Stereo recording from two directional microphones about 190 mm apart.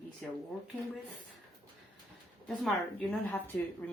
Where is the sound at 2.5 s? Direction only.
5° left (ahead or behind).